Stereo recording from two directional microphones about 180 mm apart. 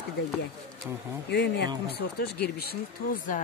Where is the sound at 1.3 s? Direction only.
65° left (ahead or behind).